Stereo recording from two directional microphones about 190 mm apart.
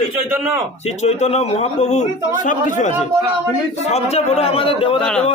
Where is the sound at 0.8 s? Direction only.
35° left (ahead or behind).